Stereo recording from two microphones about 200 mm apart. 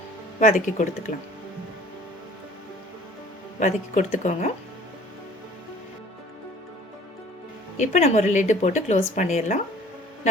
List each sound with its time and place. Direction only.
0.3 s a woman's voice: 40° left (ahead or behind)
3.6 s a woman's voice: 35° left (ahead or behind)
7.8 s a woman's voice: 35° left (ahead or behind)